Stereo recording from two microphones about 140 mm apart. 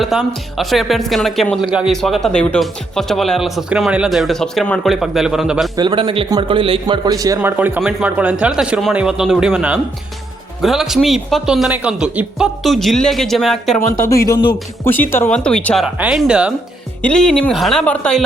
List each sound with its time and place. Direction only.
0.0 s speech: centre (ahead or behind)
5.7 s speech: 30° right (ahead or behind)
7.4 s speech: 15° right (ahead or behind)
7.8 s speech: centre (ahead or behind)
14.8 s speech: 15° left (ahead or behind)
16.0 s speech: 5° right (ahead or behind)
17.0 s speech: 5° left (ahead or behind)